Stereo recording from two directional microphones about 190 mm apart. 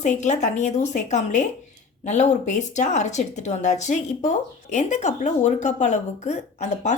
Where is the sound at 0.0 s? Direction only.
40° left (ahead or behind).